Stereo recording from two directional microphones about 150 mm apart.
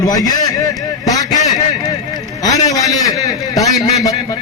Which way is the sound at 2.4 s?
25° left (ahead or behind).